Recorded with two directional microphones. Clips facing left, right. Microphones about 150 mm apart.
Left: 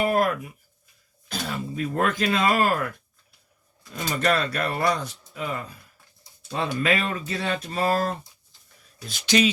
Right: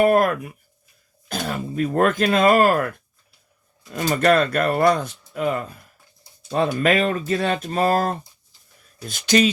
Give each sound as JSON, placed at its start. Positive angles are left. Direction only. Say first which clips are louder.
{"t": 0.0, "sound": "speech", "louder": "right 6 dB", "side_deg": -55}
{"t": 3.9, "sound": "speech", "louder": "right 6 dB", "side_deg": -55}